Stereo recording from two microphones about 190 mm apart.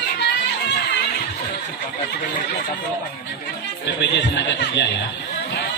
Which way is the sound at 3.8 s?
65° left (ahead or behind).